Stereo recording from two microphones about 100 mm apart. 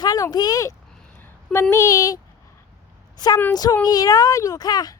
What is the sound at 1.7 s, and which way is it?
A woman's voice, 35° left (ahead or behind).